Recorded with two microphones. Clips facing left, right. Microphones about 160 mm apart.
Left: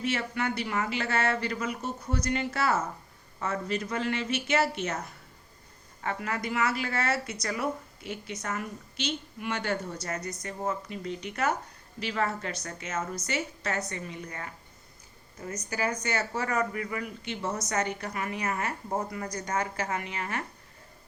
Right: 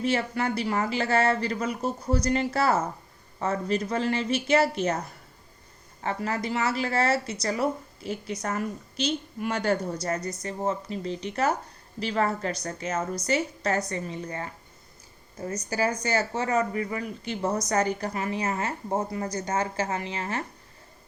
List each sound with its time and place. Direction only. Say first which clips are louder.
0.0 s speech: right 4 dB; 35° right (ahead or behind)